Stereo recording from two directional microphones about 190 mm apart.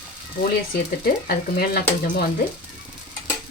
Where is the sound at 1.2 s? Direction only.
55° left (ahead or behind).